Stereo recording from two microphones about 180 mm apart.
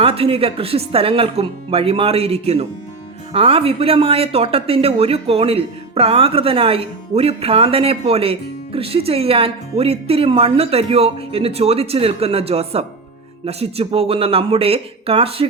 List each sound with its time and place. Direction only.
0.0 s speech: 30° right (ahead or behind)